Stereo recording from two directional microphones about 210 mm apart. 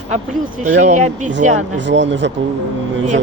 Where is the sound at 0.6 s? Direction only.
35° right (ahead or behind).